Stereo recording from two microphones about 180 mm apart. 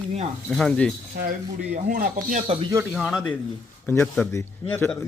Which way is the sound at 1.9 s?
50° right (ahead or behind).